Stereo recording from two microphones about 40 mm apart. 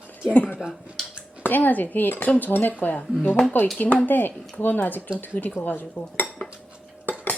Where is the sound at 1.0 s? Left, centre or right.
Centre.